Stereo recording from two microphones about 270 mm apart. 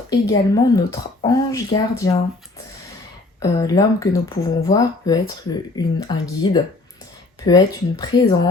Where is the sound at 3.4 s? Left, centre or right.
Centre.